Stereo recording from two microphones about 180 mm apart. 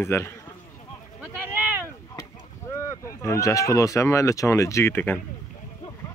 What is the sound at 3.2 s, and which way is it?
Speech, 15° left (ahead or behind).